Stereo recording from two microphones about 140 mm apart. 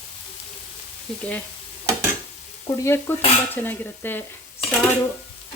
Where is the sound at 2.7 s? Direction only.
20° left (ahead or behind).